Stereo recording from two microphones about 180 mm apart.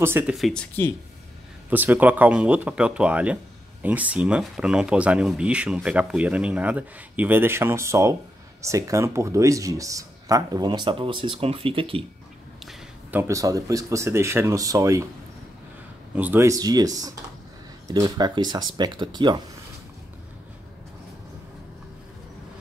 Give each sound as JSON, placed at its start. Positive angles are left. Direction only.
{"t": 0.0, "sound": "speech", "side_deg": -10}
{"t": 0.4, "sound": "speech", "side_deg": 5}
{"t": 1.7, "sound": "speech", "side_deg": -10}
{"t": 12.6, "sound": "speech", "side_deg": -10}
{"t": 16.2, "sound": "speech", "side_deg": -10}